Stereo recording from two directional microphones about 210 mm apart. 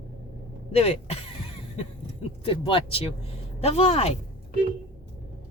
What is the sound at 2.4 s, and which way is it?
Speech, 25° left (ahead or behind).